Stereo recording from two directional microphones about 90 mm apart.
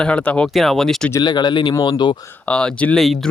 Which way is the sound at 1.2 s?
50° left (ahead or behind).